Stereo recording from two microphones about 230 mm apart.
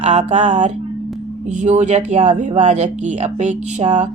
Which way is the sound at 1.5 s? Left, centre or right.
Right.